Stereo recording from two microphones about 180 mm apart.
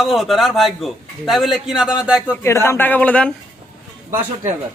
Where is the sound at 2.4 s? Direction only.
15° left (ahead or behind).